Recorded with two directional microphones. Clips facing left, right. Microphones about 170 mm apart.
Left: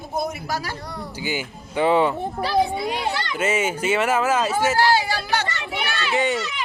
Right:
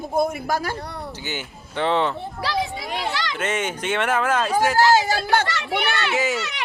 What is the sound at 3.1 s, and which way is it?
Speech, 90° right.